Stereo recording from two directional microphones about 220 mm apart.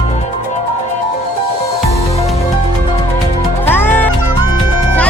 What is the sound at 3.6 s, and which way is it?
Music, 10° left (ahead or behind).